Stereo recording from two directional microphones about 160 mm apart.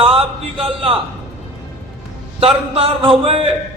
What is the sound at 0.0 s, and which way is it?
Speech, 35° right (ahead or behind).